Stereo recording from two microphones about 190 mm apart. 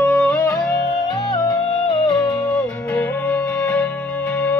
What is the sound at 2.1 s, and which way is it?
Music, 15° left (ahead or behind).